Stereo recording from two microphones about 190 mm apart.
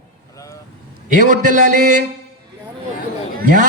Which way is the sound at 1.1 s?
40° right (ahead or behind).